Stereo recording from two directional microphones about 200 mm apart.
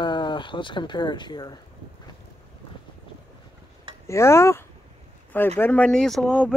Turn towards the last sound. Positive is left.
turn(degrees=0)  # may be behind; listen again after turning